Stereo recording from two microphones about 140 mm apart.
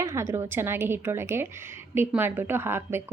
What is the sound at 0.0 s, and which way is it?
A woman's voice, 20° right (ahead or behind).